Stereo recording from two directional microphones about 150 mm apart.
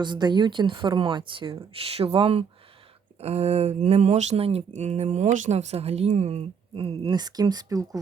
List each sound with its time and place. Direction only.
0.0 s speech: 30° right (ahead or behind)